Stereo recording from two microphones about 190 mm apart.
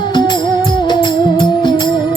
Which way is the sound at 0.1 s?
25° left (ahead or behind).